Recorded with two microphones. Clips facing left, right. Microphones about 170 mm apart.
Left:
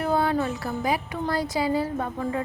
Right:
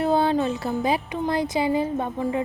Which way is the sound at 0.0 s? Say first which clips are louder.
Right 3 dB; 25° right (ahead or behind).